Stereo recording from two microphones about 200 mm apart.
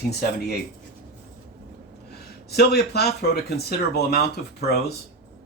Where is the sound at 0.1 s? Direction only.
55° left (ahead or behind).